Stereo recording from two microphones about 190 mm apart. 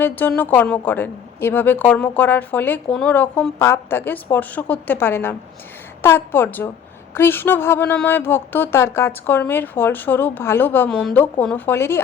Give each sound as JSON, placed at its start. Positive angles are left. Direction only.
{"t": 0.0, "sound": "a woman's voice", "side_deg": 10}